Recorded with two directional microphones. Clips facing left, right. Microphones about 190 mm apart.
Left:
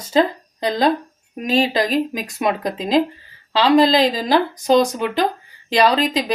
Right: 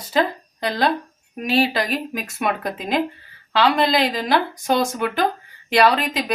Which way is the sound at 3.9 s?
35° left (ahead or behind).